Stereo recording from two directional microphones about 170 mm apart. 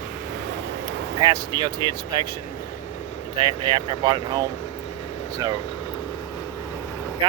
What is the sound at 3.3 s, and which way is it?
Speech, 30° right (ahead or behind).